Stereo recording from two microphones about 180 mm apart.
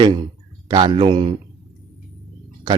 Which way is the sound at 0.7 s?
25° right (ahead or behind).